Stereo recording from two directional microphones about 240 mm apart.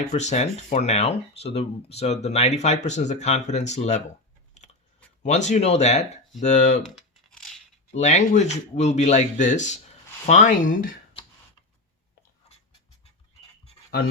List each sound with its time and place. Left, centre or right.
0.1 s speech: left
5.2 s speech: left
6.8 s tearing: centre
7.9 s speech: left